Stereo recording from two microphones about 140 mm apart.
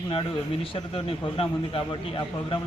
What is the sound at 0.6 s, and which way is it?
A man's voice, 40° left (ahead or behind).